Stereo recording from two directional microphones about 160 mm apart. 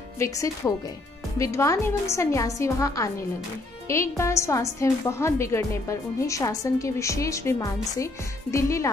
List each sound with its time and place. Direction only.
0.2 s a woman's voice: 20° left (ahead or behind)